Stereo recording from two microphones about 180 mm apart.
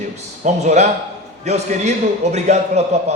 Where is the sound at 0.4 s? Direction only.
40° right (ahead or behind).